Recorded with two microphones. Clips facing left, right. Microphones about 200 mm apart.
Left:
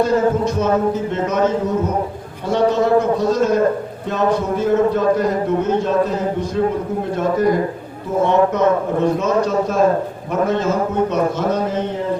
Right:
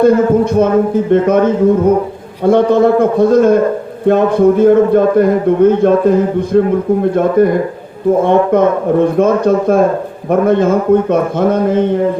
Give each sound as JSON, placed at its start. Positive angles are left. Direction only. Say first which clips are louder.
{"t": 0.0, "sound": "a man's voice", "louder": "right 7 dB", "side_deg": -55}